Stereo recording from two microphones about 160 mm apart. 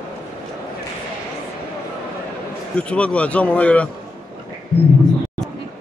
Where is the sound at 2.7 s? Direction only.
5° left (ahead or behind).